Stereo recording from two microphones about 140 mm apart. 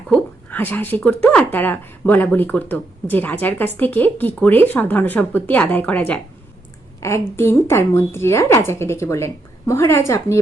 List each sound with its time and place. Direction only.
0.1 s a woman's voice: 10° left (ahead or behind)